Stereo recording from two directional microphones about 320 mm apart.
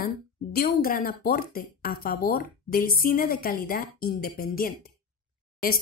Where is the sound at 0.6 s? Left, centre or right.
Left.